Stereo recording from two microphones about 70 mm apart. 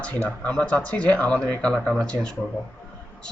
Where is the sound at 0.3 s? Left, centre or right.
Centre.